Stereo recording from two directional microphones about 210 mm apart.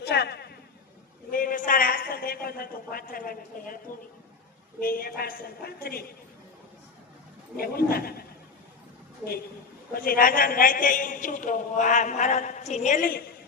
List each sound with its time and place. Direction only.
0.0 s a sound: 50° left (ahead or behind)
4.8 s a woman's voice: 45° left (ahead or behind)
7.5 s a woman's voice: 45° left (ahead or behind)
9.9 s a man's voice: 45° left (ahead or behind)